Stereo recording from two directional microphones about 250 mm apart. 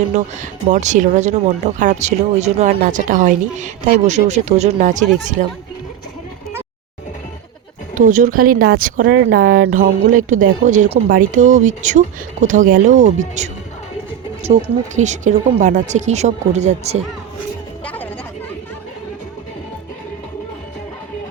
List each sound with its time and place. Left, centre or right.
0.7 s speech: right
8.2 s speech: right
14.4 s speech: right
17.8 s a sound: centre